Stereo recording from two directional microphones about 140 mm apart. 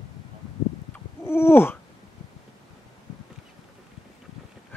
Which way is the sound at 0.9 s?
15° left (ahead or behind).